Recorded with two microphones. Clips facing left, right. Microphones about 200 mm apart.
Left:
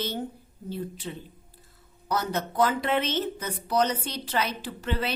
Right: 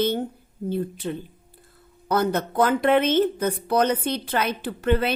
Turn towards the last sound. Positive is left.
turn(degrees=-55)  # may be behind; listen again after turning